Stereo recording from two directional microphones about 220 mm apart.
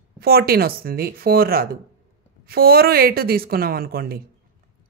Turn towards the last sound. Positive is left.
turn(degrees=-45)  # may be behind; listen again after turning